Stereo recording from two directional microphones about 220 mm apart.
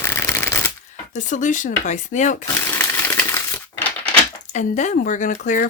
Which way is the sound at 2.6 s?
10° left (ahead or behind).